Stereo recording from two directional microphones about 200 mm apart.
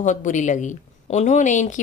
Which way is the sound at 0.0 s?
40° left (ahead or behind).